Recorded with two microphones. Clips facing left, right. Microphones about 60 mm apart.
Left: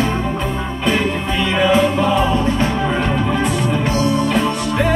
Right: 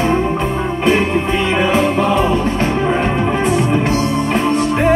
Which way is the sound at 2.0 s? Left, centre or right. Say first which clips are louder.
Right 1 dB; right.